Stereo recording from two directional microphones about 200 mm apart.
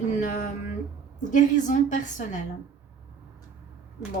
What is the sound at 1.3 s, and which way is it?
A woman's voice, 40° left (ahead or behind).